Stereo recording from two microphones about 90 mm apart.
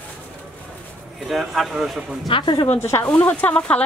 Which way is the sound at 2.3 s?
65° left (ahead or behind).